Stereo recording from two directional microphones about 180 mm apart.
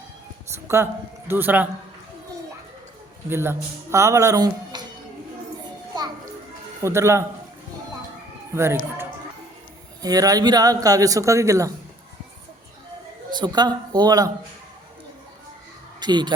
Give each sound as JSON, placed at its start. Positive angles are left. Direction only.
{"t": 1.3, "sound": "speech", "side_deg": -10}
{"t": 3.2, "sound": "speech", "side_deg": -15}
{"t": 6.8, "sound": "speech", "side_deg": -15}
{"t": 8.5, "sound": "speech", "side_deg": -15}
{"t": 13.3, "sound": "speech", "side_deg": -25}
{"t": 16.0, "sound": "speech", "side_deg": -25}